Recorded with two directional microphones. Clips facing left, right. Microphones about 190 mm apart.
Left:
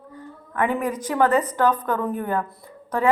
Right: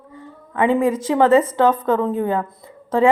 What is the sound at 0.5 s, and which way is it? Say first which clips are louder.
A woman's voice: right 6 dB; 25° right (ahead or behind).